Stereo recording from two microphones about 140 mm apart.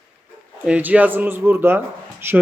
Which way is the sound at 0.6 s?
10° right (ahead or behind).